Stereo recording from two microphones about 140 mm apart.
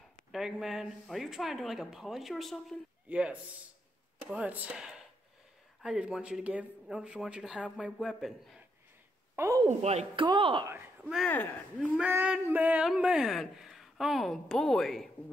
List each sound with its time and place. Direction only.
0.3 s speech: 5° right (ahead or behind)
9.4 s a woman's voice: 20° right (ahead or behind)
9.7 s speech: 50° right (ahead or behind)
10.2 s speech: 35° right (ahead or behind)
10.7 s speech: 5° right (ahead or behind)